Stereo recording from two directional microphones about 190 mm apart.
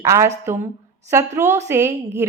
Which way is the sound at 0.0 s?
15° right (ahead or behind).